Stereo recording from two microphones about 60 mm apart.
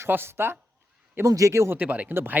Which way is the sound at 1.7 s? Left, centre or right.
Right.